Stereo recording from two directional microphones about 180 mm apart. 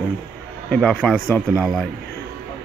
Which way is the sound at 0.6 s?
5° left (ahead or behind).